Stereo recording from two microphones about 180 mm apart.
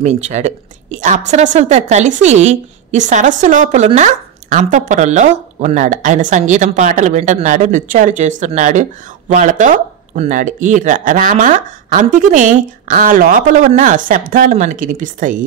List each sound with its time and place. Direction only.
0.0 s a woman's voice: 40° right (ahead or behind)